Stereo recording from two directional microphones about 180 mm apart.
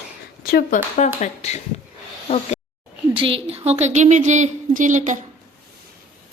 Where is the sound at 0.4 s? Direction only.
55° left (ahead or behind).